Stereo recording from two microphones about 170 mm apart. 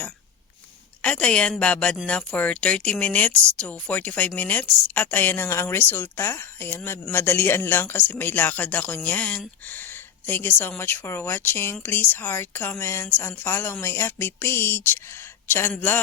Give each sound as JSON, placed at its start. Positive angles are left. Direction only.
{"t": 1.0, "sound": "speech", "side_deg": 5}